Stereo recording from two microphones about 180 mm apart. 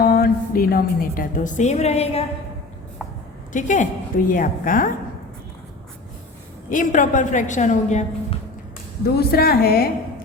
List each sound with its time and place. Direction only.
0.0 s a woman's voice: 55° left (ahead or behind); by 2.2 s 35° left (ahead or behind)
3.5 s a woman's voice: 45° left (ahead or behind)
6.7 s a woman's voice: 45° left (ahead or behind)
9.0 s a woman's voice: 60° left (ahead or behind)